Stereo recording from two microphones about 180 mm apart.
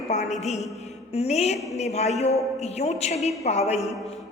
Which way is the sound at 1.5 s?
Centre (ahead or behind).